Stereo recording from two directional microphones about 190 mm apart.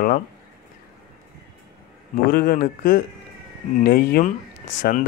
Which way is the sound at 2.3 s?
50° left (ahead or behind).